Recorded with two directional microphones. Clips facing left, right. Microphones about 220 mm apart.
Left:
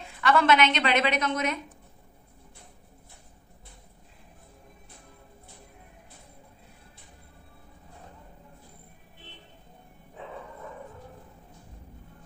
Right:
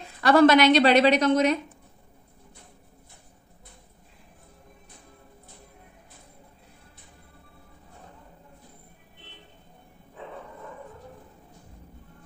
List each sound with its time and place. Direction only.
0.2 s a woman's voice: 40° right (ahead or behind)